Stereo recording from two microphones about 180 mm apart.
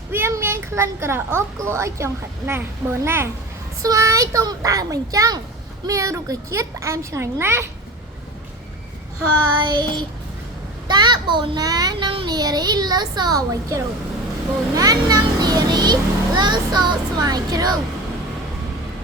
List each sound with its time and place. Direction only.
0.1 s a woman's voice: 15° right (ahead or behind)
9.6 s a child's voice: 25° right (ahead or behind)